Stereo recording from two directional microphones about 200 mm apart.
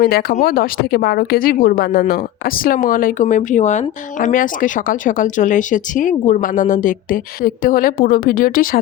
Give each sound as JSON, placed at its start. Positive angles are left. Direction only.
{"t": 0.0, "sound": "speech", "side_deg": 50}